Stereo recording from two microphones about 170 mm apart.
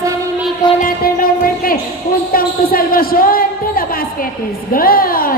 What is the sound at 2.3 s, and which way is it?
A woman's voice, 60° left (ahead or behind).